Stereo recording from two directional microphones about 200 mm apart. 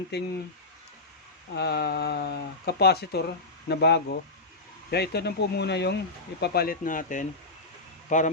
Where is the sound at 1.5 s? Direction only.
55° left (ahead or behind).